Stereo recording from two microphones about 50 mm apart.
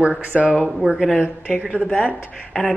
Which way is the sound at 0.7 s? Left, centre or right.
Centre.